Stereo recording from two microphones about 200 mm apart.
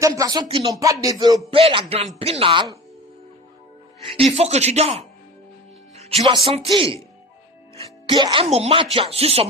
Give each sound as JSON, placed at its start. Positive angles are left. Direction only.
{"t": 0.0, "sound": "speech", "side_deg": -15}
{"t": 0.8, "sound": "speech", "side_deg": -15}
{"t": 4.0, "sound": "speech", "side_deg": -30}